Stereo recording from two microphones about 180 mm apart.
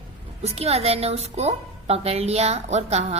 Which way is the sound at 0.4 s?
35° right (ahead or behind).